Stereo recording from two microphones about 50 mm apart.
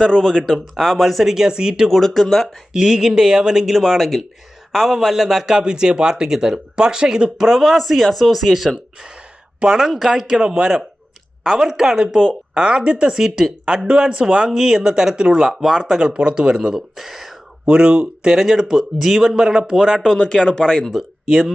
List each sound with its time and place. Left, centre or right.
0.0 s speech: centre
1.9 s speech: centre
2.7 s a man's voice: centre
7.4 s speech: centre
9.7 s speech: centre
10.3 s a man's voice: centre
13.7 s a man's voice: centre
14.5 s a man's voice: centre
16.0 s a man's voice: centre
17.7 s a man's voice: centre
20.1 s speech: centre
21.2 s speech: centre